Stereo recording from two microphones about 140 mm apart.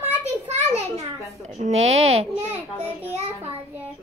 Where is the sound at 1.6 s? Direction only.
50° right (ahead or behind).